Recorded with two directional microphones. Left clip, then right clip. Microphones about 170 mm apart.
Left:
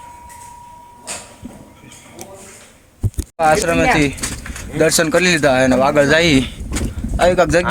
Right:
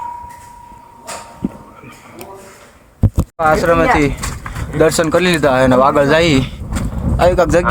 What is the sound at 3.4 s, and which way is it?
Speech, 20° right (ahead or behind).